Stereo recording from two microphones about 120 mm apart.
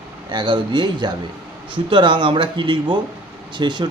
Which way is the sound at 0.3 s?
40° right (ahead or behind).